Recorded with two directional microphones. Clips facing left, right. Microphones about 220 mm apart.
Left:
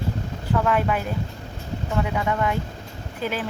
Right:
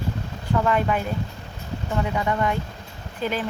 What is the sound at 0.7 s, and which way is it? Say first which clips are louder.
Speech: even; 5° left (ahead or behind).